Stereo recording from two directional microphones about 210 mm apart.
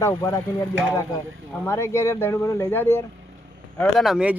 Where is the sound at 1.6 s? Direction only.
15° left (ahead or behind).